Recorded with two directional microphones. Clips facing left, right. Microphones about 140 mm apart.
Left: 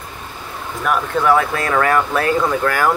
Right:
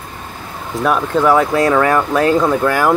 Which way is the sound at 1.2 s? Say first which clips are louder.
Right 4 dB; 15° right (ahead or behind).